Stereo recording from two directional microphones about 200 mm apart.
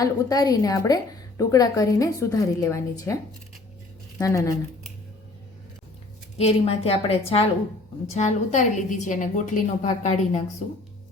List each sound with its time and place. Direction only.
0.0 s a woman's voice: 20° left (ahead or behind)
4.2 s a woman's voice: 15° left (ahead or behind)
6.4 s a woman's voice: 30° left (ahead or behind)